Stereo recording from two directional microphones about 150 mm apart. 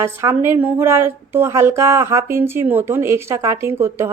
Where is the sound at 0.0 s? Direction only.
15° right (ahead or behind).